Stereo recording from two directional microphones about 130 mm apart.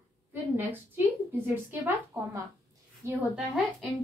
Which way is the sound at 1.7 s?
15° right (ahead or behind).